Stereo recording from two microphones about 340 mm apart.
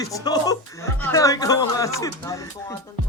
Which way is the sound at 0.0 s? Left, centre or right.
Centre.